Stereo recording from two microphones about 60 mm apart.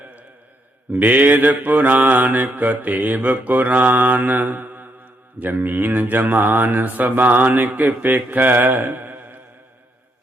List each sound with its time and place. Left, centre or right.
0.9 s mantra: right